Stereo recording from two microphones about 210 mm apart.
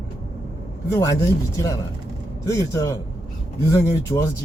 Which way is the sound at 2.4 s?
15° left (ahead or behind).